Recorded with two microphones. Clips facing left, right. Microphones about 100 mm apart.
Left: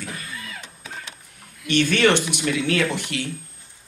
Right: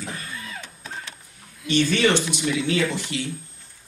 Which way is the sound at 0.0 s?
25° right (ahead or behind).